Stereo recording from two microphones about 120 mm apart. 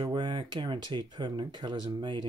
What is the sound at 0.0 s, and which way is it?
Speech, 40° right (ahead or behind).